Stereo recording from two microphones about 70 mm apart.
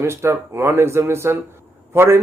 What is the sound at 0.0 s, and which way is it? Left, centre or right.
Speech, right.